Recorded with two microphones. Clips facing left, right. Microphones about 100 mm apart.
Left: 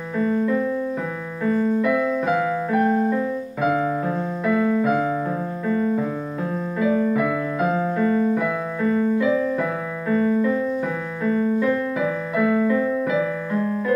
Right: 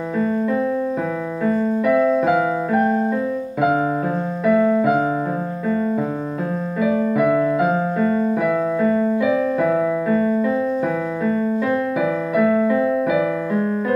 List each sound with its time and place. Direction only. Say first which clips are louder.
1.4 s piano: right 1 dB; 20° right (ahead or behind)
4.5 s keyboard: right 4 dB; 20° right (ahead or behind)
6.8 s piano: right 2 dB; 20° right (ahead or behind)
9.6 s music: right 8 dB; 20° right (ahead or behind)
11.6 s keyboard: right 2 dB; 20° right (ahead or behind)